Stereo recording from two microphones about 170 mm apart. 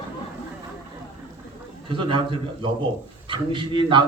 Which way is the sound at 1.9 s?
30° right (ahead or behind).